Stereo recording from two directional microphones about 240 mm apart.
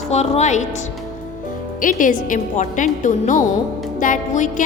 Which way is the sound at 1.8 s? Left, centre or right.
Left.